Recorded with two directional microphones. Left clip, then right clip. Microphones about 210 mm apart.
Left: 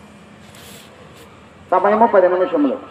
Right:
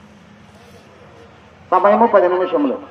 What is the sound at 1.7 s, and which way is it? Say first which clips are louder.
Speech: right 1 dB; 20° right (ahead or behind).